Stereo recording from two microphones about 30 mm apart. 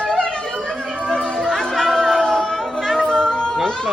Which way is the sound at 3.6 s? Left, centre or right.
Centre.